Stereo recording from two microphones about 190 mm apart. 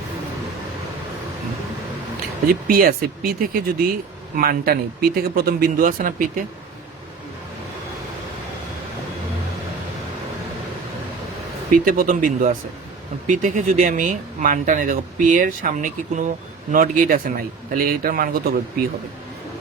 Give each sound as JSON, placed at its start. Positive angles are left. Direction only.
{"t": 2.5, "sound": "speech", "side_deg": -50}
{"t": 11.7, "sound": "speech", "side_deg": -45}